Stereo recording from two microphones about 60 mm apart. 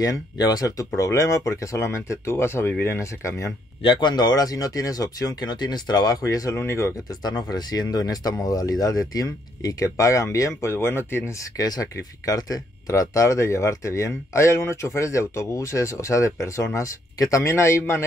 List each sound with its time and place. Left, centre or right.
0.0 s speech: left
4.3 s speech: left
6.0 s speech: left
6.5 s speech: left
7.2 s speech: left
11.5 s speech: left